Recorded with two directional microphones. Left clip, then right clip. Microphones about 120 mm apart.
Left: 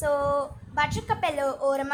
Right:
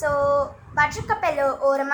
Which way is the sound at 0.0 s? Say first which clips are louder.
Right 4 dB; 75° left (ahead or behind).